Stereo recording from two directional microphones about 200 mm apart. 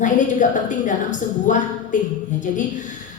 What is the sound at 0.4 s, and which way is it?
A woman's voice, 40° left (ahead or behind).